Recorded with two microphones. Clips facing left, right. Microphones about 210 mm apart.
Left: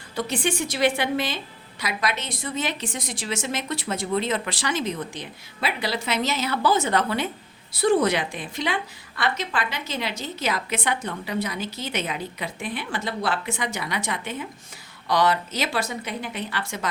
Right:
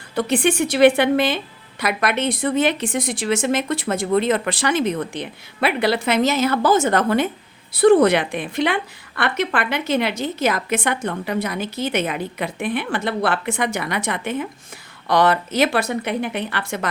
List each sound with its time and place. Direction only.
0.2 s a woman's voice: 60° right (ahead or behind)
7.7 s a woman's voice: 60° right (ahead or behind)